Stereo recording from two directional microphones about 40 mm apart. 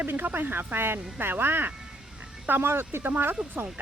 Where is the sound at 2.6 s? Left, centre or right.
Right.